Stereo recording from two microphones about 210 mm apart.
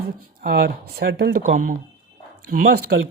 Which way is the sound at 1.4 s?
35° right (ahead or behind).